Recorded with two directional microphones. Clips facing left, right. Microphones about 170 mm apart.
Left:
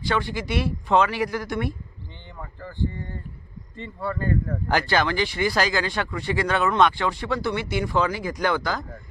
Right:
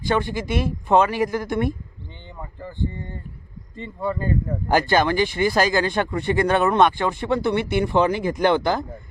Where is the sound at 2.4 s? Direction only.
20° right (ahead or behind).